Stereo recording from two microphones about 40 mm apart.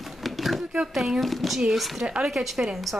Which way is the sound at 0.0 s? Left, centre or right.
Centre.